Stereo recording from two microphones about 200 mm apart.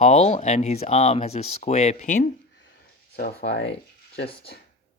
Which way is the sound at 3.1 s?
50° left (ahead or behind).